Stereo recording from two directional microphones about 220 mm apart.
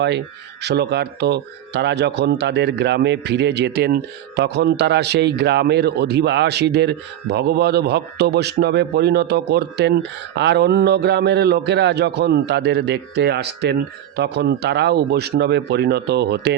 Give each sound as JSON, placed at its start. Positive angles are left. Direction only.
{"t": 0.6, "sound": "speech", "side_deg": -50}